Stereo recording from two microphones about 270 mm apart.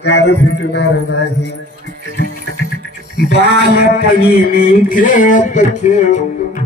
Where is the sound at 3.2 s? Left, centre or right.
Left.